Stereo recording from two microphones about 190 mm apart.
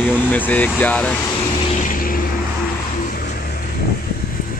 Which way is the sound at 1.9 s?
50° left (ahead or behind).